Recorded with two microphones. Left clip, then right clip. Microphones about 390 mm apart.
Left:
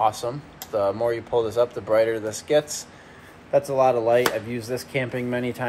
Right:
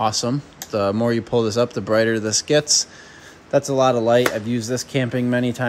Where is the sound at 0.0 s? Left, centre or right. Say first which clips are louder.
Right 2 dB; right.